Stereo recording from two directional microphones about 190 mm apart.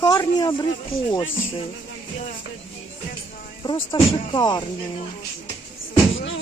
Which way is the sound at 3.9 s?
20° left (ahead or behind).